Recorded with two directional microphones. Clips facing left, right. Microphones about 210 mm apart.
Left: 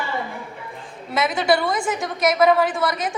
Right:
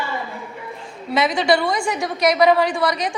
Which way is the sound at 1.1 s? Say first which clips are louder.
Right 2 dB; 5° left (ahead or behind).